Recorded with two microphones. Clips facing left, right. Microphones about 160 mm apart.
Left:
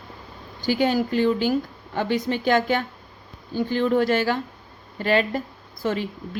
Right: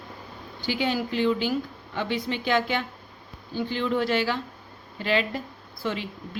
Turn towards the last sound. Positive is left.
turn(degrees=45)  # may be behind; listen again after turning